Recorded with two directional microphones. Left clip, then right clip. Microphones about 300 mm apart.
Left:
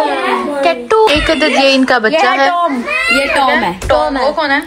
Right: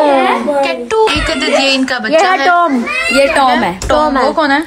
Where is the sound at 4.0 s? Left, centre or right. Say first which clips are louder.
Right 3 dB; right.